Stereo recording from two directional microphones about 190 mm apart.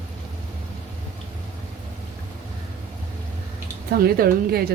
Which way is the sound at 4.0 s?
55° right (ahead or behind).